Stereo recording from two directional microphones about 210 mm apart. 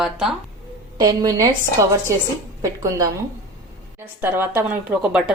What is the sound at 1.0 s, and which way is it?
A woman's voice, 15° right (ahead or behind).